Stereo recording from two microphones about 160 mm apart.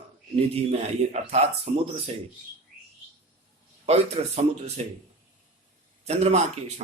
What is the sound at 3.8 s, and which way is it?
Speech, 40° right (ahead or behind).